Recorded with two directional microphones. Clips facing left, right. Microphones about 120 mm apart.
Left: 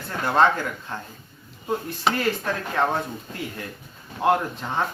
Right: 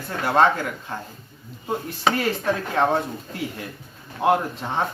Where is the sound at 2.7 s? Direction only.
15° right (ahead or behind).